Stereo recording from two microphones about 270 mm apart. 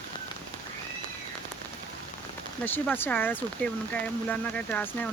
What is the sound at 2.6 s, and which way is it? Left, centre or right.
Speech, centre.